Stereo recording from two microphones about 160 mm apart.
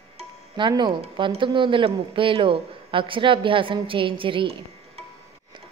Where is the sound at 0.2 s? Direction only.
30° right (ahead or behind).